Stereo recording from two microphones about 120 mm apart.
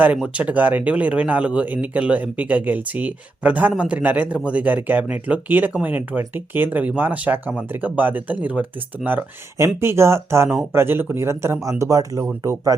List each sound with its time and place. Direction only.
0.0 s speech: 10° right (ahead or behind); by 12.7 s 30° right (ahead or behind)